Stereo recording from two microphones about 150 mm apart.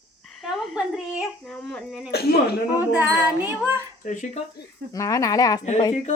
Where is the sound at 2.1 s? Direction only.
90° left.